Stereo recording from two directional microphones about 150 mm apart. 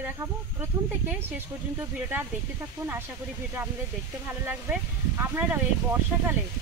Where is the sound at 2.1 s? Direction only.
15° right (ahead or behind).